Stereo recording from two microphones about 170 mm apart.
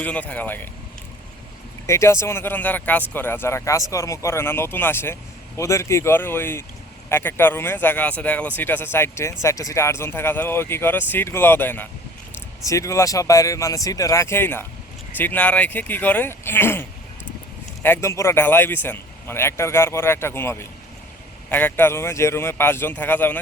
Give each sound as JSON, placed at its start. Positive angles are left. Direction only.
{"t": 0.0, "sound": "speech", "side_deg": 10}
{"t": 1.9, "sound": "speech", "side_deg": 15}
{"t": 17.8, "sound": "speech", "side_deg": 15}